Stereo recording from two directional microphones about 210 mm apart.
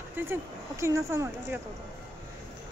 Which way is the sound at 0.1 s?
10° right (ahead or behind).